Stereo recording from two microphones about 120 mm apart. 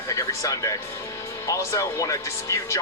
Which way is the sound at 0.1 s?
25° left (ahead or behind).